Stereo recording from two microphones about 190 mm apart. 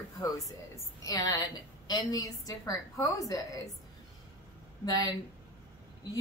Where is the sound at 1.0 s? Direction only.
20° left (ahead or behind).